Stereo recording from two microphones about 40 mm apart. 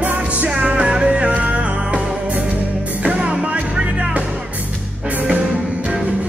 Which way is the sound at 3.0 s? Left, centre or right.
Right.